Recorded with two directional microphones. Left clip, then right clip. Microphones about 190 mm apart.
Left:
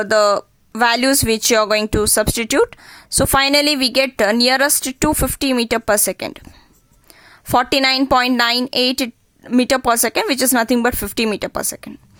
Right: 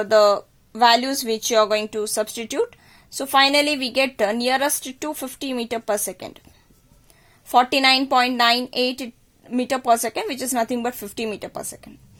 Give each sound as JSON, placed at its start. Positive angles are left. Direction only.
{"t": 0.0, "sound": "speech", "side_deg": 35}
{"t": 7.5, "sound": "speech", "side_deg": 35}